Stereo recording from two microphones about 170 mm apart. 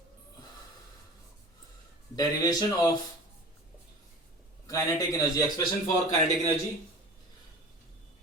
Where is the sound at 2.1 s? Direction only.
25° left (ahead or behind).